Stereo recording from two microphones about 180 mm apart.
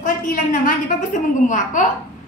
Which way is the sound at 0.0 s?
45° left (ahead or behind).